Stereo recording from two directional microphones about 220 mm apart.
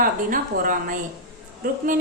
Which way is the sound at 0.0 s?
40° right (ahead or behind).